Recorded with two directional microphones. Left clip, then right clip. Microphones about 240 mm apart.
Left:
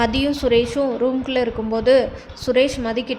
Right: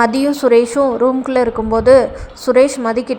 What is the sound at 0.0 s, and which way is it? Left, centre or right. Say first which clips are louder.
A woman's voice: right 6 dB; centre.